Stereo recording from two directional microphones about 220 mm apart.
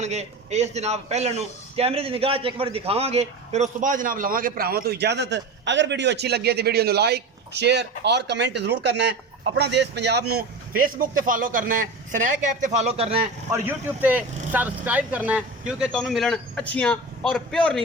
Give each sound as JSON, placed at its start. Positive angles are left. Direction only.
{"t": 0.0, "sound": "a man's voice", "side_deg": -30}
{"t": 13.5, "sound": "speech", "side_deg": -10}